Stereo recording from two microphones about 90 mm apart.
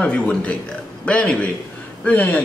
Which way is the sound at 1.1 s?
15° left (ahead or behind).